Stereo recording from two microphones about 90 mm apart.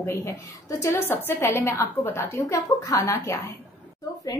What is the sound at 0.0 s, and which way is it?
A woman's voice, 30° left (ahead or behind).